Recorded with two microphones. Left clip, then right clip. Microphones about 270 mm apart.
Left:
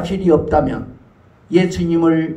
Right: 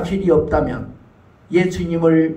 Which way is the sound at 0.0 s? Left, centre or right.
Left.